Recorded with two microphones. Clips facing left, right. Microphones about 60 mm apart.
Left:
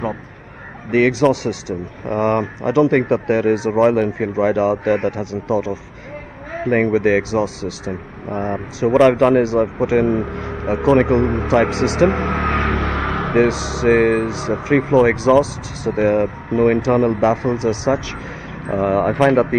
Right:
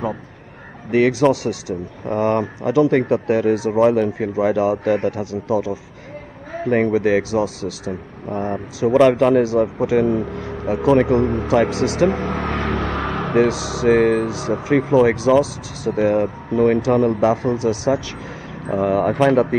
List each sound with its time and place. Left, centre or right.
1.3 s speech: left
7.2 s speech: left
13.3 s speech: left